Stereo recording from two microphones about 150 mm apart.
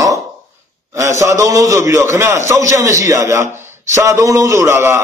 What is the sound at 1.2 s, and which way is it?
A man's voice, 20° right (ahead or behind).